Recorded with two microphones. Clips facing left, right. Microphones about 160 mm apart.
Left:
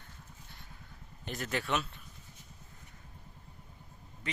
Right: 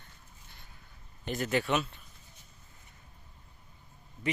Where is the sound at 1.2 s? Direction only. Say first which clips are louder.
Right 6 dB; centre (ahead or behind).